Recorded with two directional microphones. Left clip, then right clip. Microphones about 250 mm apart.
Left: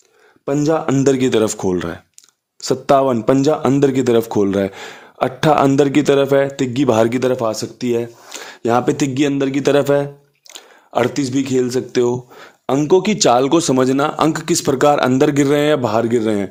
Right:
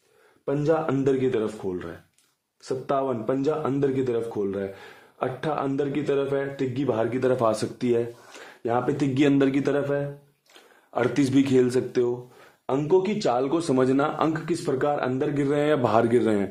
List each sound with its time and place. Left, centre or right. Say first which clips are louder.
0.4 s a man's voice: left 7 dB; left
7.3 s speech: left 4 dB; centre
8.3 s speech: left 10 dB; left
9.7 s a man's voice: left 11 dB; left
11.1 s a man's voice: left 3 dB; centre
11.9 s speech: left 8 dB; left
12.6 s speech: left 8 dB; left